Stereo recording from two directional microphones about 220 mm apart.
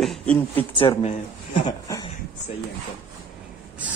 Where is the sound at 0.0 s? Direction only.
Centre (ahead or behind).